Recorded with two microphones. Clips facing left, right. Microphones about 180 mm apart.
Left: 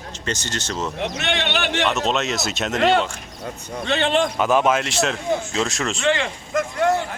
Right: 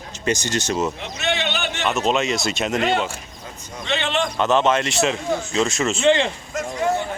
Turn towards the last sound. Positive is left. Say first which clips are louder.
# left 3 dB
turn(degrees=65)  # may be behind; listen again after turning